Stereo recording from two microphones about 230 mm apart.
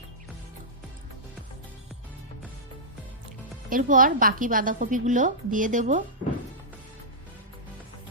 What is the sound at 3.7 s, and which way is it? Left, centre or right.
A woman's voice, right.